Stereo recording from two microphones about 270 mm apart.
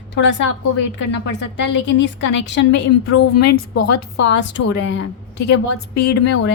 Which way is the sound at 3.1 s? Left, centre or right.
Left.